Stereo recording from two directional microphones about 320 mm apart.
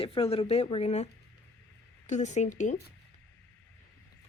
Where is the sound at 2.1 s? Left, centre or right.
Left.